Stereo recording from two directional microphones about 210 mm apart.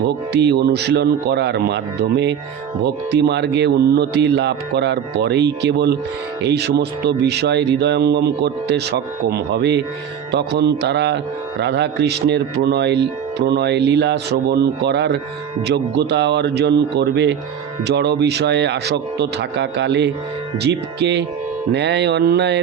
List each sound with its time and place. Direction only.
0.4 s a man's voice: 50° right (ahead or behind)